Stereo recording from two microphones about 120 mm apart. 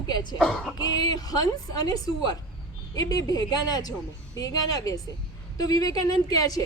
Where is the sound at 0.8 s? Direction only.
35° left (ahead or behind).